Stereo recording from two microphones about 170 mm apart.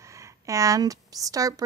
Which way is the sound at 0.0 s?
20° right (ahead or behind).